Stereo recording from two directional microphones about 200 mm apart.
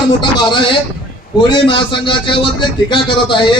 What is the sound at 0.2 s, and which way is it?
A man's voice, 25° left (ahead or behind).